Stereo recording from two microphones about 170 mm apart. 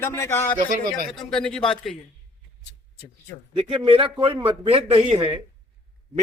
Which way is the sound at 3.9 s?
35° right (ahead or behind).